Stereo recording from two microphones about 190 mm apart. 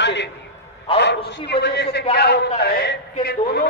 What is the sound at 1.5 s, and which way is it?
A man's voice, 60° left (ahead or behind).